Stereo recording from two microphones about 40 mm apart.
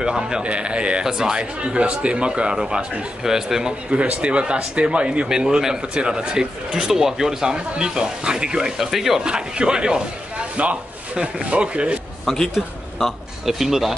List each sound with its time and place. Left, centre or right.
0.0 s speech: centre
0.4 s speech: right
1.0 s speech: centre
1.4 s speech: right
3.9 s speech: right
8.7 s speech: centre
9.2 s speech: right
10.6 s speech: right
12.3 s a man's voice: centre